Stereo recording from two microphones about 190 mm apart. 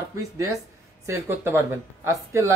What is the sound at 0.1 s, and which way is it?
Speech, 15° right (ahead or behind).